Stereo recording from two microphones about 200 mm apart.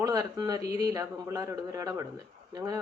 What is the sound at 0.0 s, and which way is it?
Speech, 20° right (ahead or behind).